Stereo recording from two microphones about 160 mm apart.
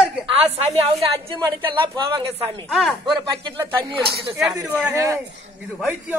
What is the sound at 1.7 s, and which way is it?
Speech, 30° right (ahead or behind).